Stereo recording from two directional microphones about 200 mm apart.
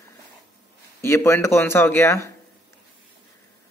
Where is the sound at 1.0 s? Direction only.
15° left (ahead or behind).